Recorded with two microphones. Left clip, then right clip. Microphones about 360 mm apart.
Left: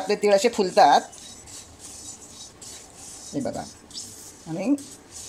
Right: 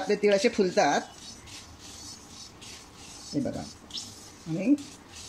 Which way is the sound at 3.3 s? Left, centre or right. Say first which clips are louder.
Left 2 dB; left.